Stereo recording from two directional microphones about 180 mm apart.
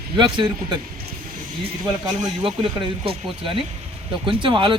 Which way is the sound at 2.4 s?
30° right (ahead or behind).